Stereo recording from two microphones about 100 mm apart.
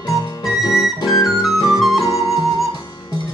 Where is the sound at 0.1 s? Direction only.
30° left (ahead or behind).